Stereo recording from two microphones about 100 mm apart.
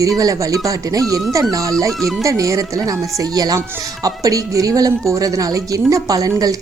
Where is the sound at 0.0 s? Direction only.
35° right (ahead or behind).